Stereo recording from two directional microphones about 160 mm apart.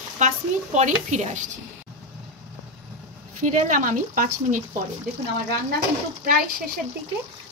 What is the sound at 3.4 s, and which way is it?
Speech, 50° right (ahead or behind).